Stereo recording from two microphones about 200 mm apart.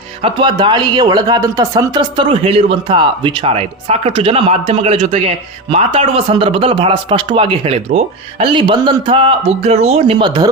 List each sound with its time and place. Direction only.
0.2 s speech: 25° right (ahead or behind)